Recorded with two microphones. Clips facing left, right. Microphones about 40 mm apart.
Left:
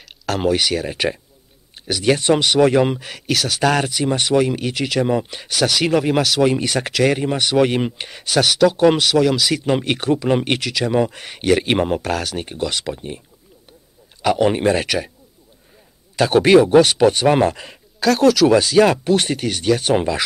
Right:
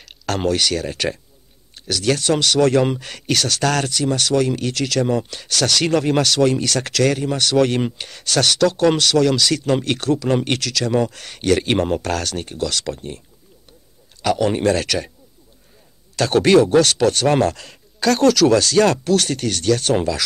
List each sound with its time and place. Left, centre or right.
0.0 s speech: centre
14.2 s speech: centre
16.2 s speech: centre
18.0 s speech: centre; by 20.2 s left